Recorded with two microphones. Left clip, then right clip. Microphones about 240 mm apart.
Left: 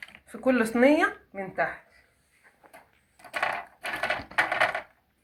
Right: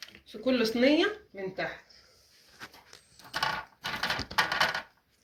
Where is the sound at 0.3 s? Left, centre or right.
Left.